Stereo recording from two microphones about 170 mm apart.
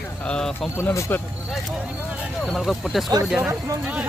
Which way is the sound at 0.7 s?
15° left (ahead or behind).